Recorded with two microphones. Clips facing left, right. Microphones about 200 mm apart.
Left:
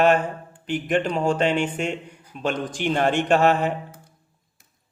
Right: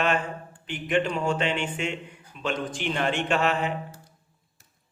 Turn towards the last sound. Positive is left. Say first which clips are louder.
# left 6 dB
turn(degrees=45)  # may be behind; listen again after turning